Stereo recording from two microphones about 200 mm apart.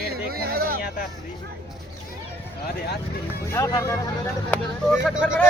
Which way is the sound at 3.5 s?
15° left (ahead or behind).